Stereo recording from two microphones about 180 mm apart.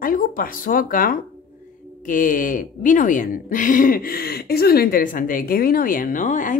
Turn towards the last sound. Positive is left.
turn(degrees=45)  # may be behind; listen again after turning